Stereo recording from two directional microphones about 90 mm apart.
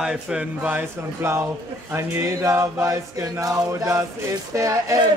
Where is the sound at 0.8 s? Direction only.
25° right (ahead or behind).